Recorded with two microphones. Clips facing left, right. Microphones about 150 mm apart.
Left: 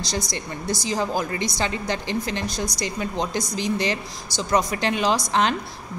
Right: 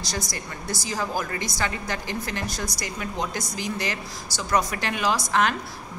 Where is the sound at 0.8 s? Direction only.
20° left (ahead or behind).